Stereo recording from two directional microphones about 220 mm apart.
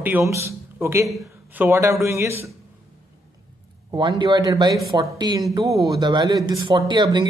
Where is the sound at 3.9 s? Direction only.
20° right (ahead or behind).